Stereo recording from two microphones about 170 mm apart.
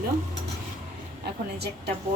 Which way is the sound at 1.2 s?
75° right (ahead or behind).